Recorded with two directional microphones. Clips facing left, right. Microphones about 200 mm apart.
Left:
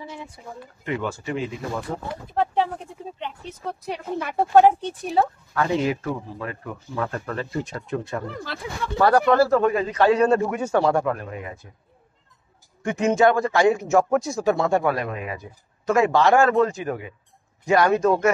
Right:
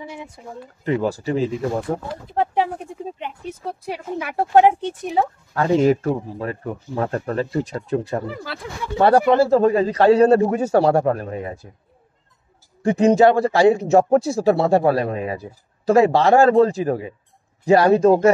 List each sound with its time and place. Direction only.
0.0 s speech: 15° right (ahead or behind)
0.8 s a man's voice: 35° right (ahead or behind)
2.3 s speech: 10° right (ahead or behind)
5.5 s a man's voice: 40° right (ahead or behind)
8.3 s speech: 5° right (ahead or behind)
8.9 s a man's voice: 30° right (ahead or behind)
12.8 s a man's voice: 35° right (ahead or behind)